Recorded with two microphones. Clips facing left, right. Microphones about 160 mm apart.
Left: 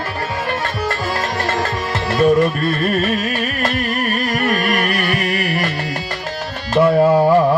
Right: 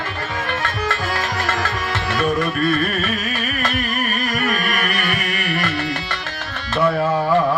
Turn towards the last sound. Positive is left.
turn(degrees=35)  # may be behind; listen again after turning